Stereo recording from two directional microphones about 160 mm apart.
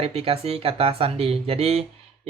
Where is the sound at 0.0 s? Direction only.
40° right (ahead or behind).